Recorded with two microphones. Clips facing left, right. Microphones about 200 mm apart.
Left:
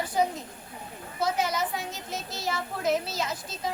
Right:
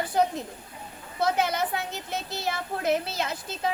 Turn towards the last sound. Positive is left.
turn(degrees=-60)  # may be behind; listen again after turning